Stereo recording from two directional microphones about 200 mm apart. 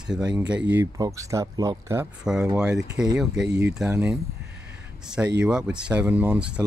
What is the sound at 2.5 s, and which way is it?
Speech, 5° right (ahead or behind).